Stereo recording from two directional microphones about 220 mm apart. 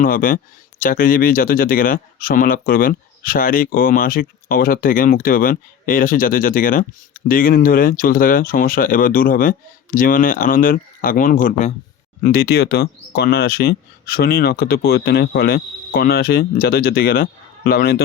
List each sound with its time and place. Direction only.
0.0 s speech: 40° left (ahead or behind)